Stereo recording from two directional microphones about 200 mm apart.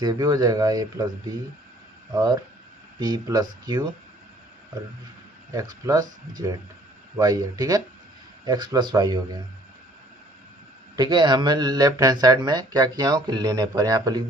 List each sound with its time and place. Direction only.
0.0 s speech: 20° right (ahead or behind)
2.1 s speech: 20° right (ahead or behind)
5.5 s speech: 20° right (ahead or behind)
10.9 s speech: 20° right (ahead or behind)